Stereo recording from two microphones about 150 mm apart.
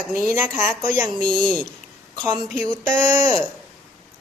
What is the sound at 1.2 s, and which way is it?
Speech, 5° left (ahead or behind).